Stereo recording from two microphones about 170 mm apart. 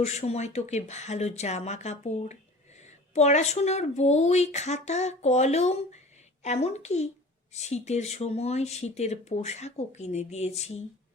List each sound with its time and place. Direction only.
0.0 s speech: 40° left (ahead or behind)